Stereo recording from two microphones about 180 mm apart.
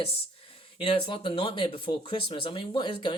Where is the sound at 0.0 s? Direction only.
30° left (ahead or behind).